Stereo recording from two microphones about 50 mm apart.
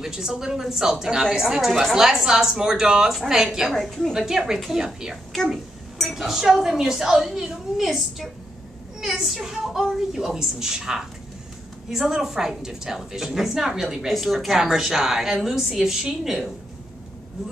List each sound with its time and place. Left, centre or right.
0.0 s a woman's voice: centre
3.8 s a woman's voice: centre
4.3 s a woman's voice: centre